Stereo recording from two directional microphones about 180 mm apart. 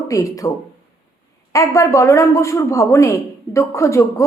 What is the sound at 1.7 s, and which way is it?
Speech, 15° left (ahead or behind).